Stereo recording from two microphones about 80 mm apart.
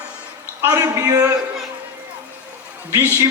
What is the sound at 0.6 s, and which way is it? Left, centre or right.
Speech, right.